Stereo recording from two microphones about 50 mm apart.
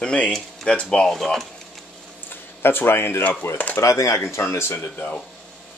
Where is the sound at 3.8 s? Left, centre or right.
Left.